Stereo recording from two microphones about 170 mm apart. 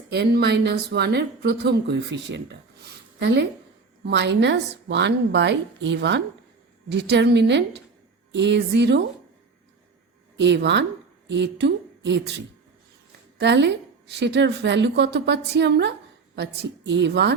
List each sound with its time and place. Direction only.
0.1 s a woman's voice: 80° right
10.3 s a woman's voice: 90° right
13.4 s a woman's voice: 90° right